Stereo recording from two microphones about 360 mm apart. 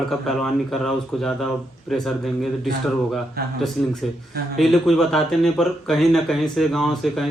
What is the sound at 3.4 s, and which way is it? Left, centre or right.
Speech, right.